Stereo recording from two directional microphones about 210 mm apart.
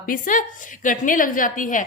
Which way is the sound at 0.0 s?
40° left (ahead or behind).